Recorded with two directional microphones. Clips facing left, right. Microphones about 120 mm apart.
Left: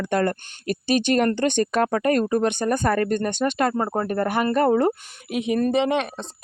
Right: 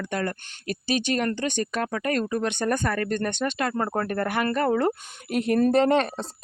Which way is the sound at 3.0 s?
15° left (ahead or behind).